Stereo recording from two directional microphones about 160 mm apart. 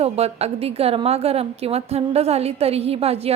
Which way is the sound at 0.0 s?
40° right (ahead or behind).